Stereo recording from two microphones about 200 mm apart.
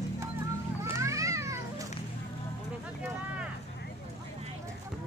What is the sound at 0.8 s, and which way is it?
Cat, 15° right (ahead or behind).